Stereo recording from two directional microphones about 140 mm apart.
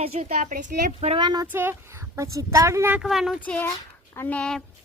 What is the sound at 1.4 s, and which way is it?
A woman's voice, 15° right (ahead or behind).